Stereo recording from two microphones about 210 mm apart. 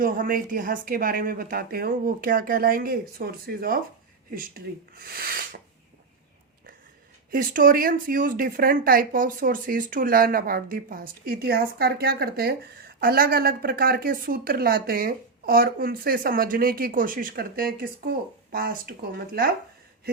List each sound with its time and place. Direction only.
0.0 s speech: 40° right (ahead or behind)
7.3 s speech: 40° right (ahead or behind)